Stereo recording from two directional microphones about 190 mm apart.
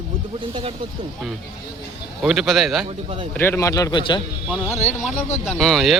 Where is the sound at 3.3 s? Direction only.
10° left (ahead or behind).